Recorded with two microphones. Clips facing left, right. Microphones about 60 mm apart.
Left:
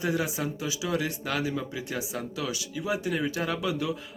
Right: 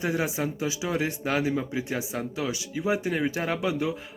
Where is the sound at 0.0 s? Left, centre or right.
Right.